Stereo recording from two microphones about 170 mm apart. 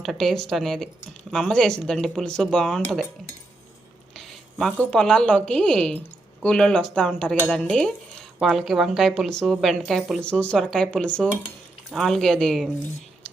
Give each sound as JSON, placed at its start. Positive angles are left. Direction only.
{"t": 0.0, "sound": "speech", "side_deg": 0}
{"t": 4.1, "sound": "a woman's voice", "side_deg": 0}